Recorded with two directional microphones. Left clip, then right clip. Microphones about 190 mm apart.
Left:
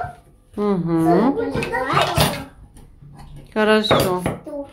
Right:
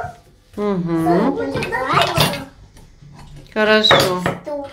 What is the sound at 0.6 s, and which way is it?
Speech, 15° left (ahead or behind).